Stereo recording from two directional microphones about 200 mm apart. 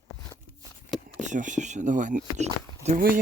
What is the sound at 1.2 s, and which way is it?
Speech, 40° right (ahead or behind).